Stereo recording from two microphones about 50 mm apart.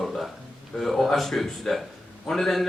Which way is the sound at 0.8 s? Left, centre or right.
Centre.